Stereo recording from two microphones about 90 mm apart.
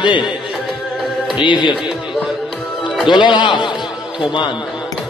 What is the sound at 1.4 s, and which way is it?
Speech, 60° left (ahead or behind).